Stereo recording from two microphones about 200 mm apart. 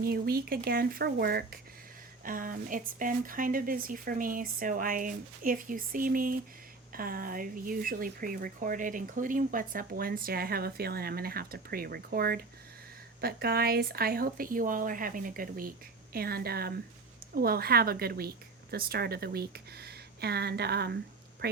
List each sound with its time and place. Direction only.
0.0 s speech: 50° right (ahead or behind)